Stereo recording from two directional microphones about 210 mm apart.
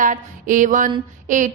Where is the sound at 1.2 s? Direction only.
35° right (ahead or behind).